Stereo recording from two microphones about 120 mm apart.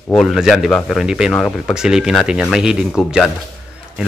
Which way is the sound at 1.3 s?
10° left (ahead or behind).